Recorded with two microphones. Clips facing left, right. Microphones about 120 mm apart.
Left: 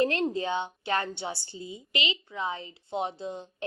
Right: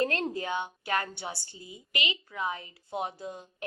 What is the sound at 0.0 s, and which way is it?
A woman's voice, 20° left (ahead or behind).